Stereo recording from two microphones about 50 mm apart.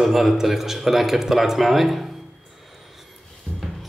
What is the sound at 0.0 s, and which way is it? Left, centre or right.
Speech, centre.